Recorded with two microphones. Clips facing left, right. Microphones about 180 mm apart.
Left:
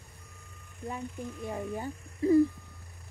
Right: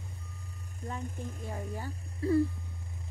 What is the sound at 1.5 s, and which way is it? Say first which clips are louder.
Speech: left 6 dB; 20° left (ahead or behind).